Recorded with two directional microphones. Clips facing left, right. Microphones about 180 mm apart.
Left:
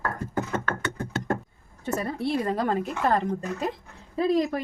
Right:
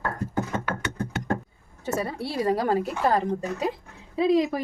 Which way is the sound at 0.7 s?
10° right (ahead or behind).